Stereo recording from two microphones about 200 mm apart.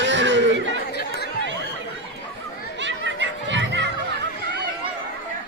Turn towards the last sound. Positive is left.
turn(degrees=-65)  # may be behind; listen again after turning